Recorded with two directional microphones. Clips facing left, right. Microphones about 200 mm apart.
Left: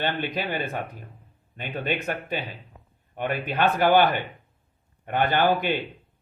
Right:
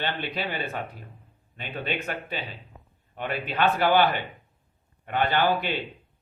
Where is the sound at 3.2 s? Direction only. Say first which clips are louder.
Left 2 dB; 50° left (ahead or behind).